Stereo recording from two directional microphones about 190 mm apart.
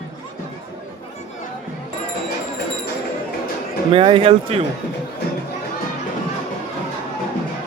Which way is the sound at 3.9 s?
25° right (ahead or behind).